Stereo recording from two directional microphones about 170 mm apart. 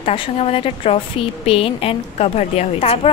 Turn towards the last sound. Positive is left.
turn(degrees=35)  # may be behind; listen again after turning